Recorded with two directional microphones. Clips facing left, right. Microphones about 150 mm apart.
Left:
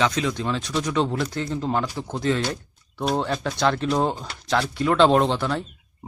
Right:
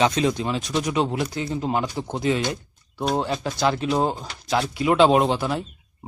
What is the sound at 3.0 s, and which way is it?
Speech, centre (ahead or behind).